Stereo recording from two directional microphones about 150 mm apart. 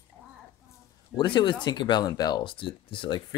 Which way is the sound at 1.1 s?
30° left (ahead or behind).